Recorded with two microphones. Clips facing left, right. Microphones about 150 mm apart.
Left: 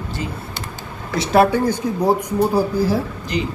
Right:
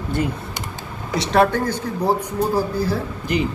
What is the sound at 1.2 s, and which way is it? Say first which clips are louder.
Speech: left 2 dB; 10° left (ahead or behind).